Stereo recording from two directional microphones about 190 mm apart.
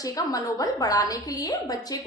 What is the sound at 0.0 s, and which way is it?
A woman's voice, 20° left (ahead or behind).